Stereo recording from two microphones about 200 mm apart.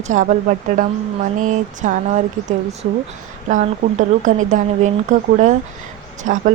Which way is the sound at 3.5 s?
40° right (ahead or behind).